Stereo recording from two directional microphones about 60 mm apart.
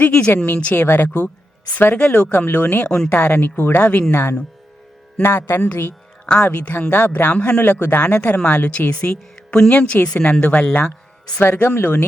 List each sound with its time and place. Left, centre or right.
0.0 s speech: left
2.0 s speech: centre
2.3 s speech: left
4.1 s speech: left
6.2 s speech: centre
11.7 s speech: left